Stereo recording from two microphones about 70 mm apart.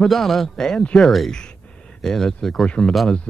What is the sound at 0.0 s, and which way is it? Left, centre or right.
Speech, centre.